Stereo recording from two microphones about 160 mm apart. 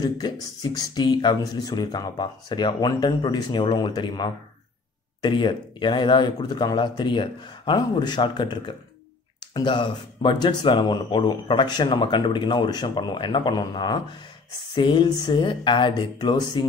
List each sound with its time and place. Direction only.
0.0 s speech: 25° left (ahead or behind)